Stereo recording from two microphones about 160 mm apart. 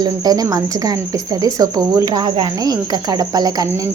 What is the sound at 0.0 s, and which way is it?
Speech, 25° right (ahead or behind).